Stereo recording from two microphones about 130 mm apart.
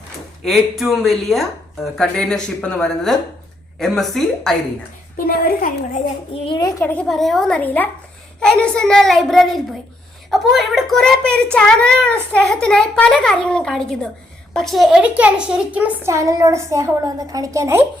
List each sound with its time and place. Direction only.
0.4 s speech: centre (ahead or behind)
5.1 s a woman's voice: 90° left
6.4 s a child's voice: 40° left (ahead or behind)
6.7 s speech: 25° left (ahead or behind)
6.9 s a child's voice: 5° left (ahead or behind)
16.0 s a woman's voice: 25° right (ahead or behind)